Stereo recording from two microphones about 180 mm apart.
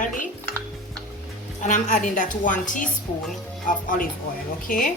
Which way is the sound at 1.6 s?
45° left (ahead or behind).